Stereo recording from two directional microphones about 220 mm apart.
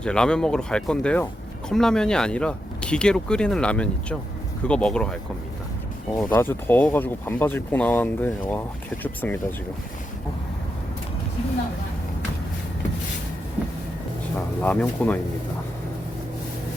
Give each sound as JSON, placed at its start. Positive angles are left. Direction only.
{"t": 0.0, "sound": "speech", "side_deg": 5}
{"t": 14.3, "sound": "speech", "side_deg": 5}